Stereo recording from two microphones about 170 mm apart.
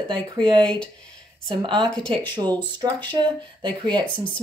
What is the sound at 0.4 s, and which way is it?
Speech, 25° right (ahead or behind).